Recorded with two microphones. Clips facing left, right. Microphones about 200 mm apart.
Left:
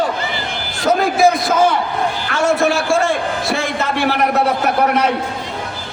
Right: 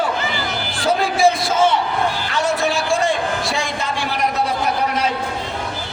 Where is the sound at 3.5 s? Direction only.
55° left (ahead or behind).